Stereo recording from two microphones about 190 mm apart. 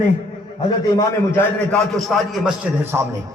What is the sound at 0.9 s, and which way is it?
Speech, 10° left (ahead or behind).